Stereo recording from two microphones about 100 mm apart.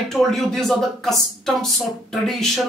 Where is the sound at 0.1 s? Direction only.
Centre (ahead or behind).